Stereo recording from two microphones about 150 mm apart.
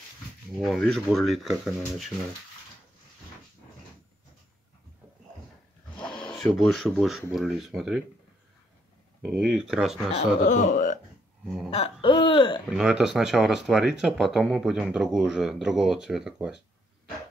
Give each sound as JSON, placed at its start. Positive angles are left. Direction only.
{"t": 0.6, "sound": "speech", "side_deg": 0}
{"t": 5.9, "sound": "speech", "side_deg": 5}
{"t": 9.4, "sound": "speech", "side_deg": 0}
{"t": 10.1, "sound": "speech", "side_deg": 55}
{"t": 11.4, "sound": "speech", "side_deg": -5}
{"t": 11.7, "sound": "speech", "side_deg": 40}
{"t": 12.6, "sound": "speech", "side_deg": -5}